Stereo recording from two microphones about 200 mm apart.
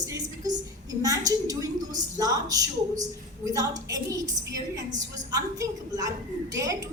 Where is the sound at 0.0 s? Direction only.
20° right (ahead or behind).